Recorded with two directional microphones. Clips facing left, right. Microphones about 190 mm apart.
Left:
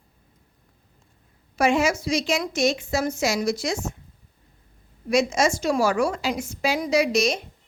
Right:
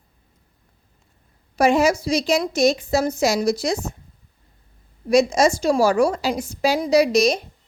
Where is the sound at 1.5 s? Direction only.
35° right (ahead or behind).